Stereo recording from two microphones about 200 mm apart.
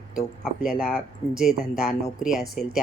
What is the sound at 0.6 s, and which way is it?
Speech, 5° right (ahead or behind).